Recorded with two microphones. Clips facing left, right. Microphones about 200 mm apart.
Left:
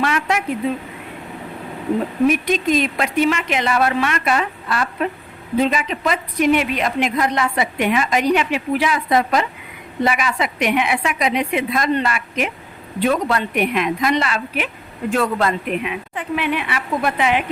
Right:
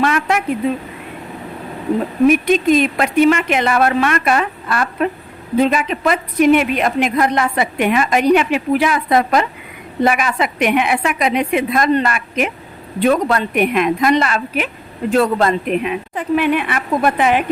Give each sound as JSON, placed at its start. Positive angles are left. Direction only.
{"t": 0.0, "sound": "a woman's voice", "side_deg": -50}
{"t": 2.2, "sound": "a woman's voice", "side_deg": -55}